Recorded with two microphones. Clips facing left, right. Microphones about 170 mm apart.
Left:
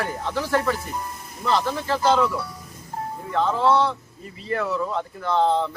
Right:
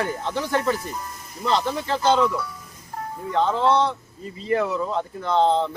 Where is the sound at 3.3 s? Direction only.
20° right (ahead or behind).